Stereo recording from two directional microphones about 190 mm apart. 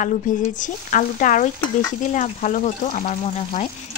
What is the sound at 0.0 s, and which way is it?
Speech, 45° left (ahead or behind).